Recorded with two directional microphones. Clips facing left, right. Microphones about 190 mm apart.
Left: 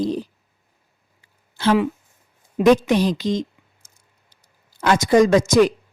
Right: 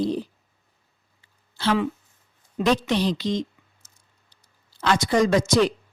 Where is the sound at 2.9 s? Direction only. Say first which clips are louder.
Left 4 dB; 45° left (ahead or behind).